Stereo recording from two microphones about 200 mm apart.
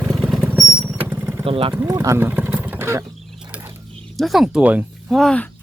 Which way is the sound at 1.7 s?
15° right (ahead or behind).